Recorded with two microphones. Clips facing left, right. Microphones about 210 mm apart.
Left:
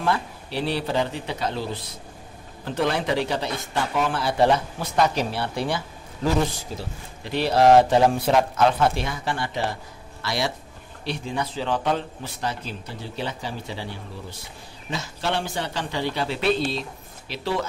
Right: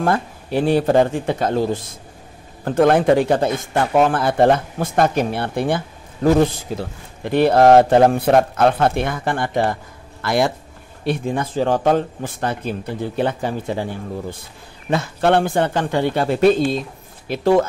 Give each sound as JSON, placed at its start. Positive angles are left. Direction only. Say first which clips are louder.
{"t": 0.0, "sound": "speech", "louder": "right 5 dB", "side_deg": -50}